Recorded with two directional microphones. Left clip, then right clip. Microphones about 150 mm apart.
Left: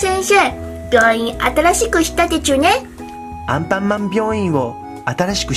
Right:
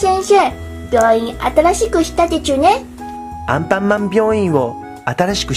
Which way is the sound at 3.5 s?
5° right (ahead or behind).